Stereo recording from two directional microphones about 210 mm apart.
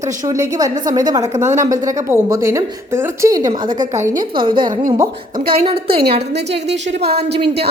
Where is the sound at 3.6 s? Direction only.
40° right (ahead or behind).